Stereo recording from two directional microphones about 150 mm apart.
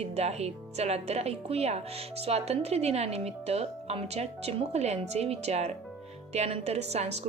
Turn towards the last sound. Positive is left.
turn(degrees=-45)  # may be behind; listen again after turning